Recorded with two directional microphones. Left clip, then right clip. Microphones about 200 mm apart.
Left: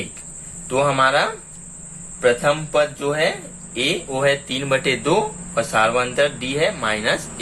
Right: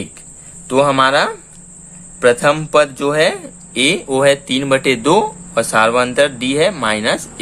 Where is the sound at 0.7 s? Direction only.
45° right (ahead or behind).